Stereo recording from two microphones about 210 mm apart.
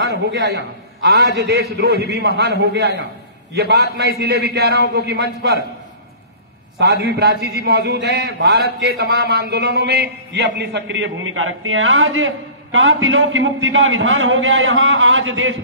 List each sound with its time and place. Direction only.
0.0 s a man's voice: 50° right (ahead or behind)
6.8 s a man's voice: 50° right (ahead or behind)